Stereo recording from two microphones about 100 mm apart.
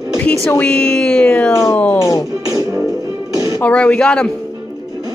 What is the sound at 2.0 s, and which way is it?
Music, 30° left (ahead or behind).